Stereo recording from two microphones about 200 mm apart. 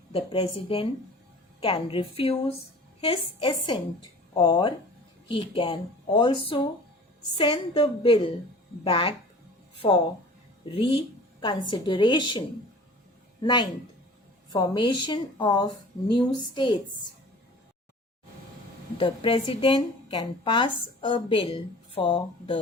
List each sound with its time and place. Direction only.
0.1 s a woman's voice: 25° left (ahead or behind)
13.4 s a woman's voice: 20° left (ahead or behind)
18.9 s a woman's voice: 25° left (ahead or behind)